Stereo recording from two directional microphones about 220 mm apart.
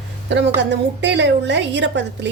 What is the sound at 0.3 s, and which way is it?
A woman's voice, 50° right (ahead or behind).